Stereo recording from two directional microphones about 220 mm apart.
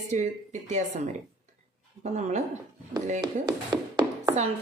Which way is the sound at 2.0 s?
30° right (ahead or behind).